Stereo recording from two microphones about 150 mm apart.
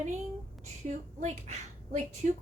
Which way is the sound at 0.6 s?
50° right (ahead or behind).